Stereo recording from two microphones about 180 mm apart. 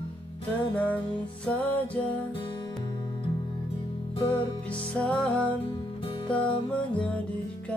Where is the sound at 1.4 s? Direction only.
10° left (ahead or behind).